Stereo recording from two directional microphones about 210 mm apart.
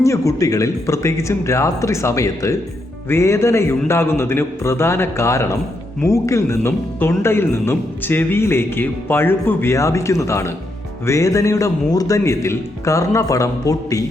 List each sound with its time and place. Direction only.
0.0 s speech: 15° left (ahead or behind)